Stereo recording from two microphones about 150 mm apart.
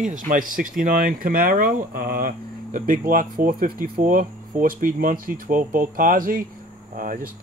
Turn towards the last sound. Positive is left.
turn(degrees=-65)  # may be behind; listen again after turning